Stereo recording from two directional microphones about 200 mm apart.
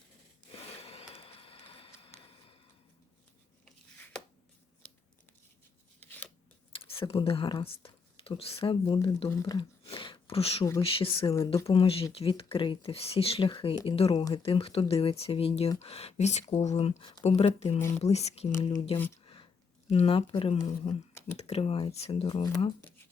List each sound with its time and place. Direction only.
0.8 s vehicle: 30° left (ahead or behind)
6.1 s scissors: 10° left (ahead or behind)
6.7 s speech: 25° left (ahead or behind)
9.3 s speech: 15° left (ahead or behind)
9.8 s a sound: 25° left (ahead or behind)
10.8 s speech: 30° left (ahead or behind)
18.9 s speech: 10° left (ahead or behind)
19.9 s speech: 30° left (ahead or behind)
21.1 s a sound: 15° left (ahead or behind)
21.3 s speech: 30° left (ahead or behind); by 23.0 s 15° left (ahead or behind)